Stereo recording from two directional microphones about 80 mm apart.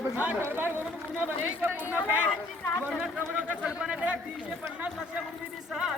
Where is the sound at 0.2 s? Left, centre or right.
Centre.